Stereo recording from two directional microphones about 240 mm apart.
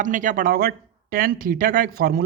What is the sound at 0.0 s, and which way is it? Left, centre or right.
Speech, right.